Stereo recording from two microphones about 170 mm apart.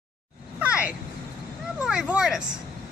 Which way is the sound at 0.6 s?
5° right (ahead or behind).